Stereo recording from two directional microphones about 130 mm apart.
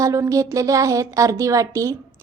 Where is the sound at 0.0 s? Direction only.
25° right (ahead or behind).